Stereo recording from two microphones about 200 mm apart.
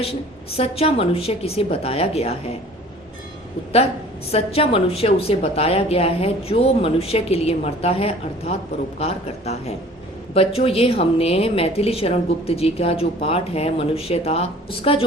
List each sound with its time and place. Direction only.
0.5 s a woman's voice: 30° left (ahead or behind)
4.3 s a woman's voice: 30° left (ahead or behind)